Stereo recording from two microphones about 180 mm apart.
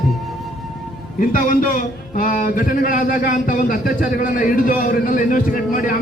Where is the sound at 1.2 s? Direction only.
50° left (ahead or behind).